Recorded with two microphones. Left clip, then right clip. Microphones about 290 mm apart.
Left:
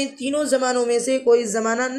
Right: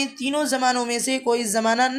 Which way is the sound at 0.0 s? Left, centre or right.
Centre.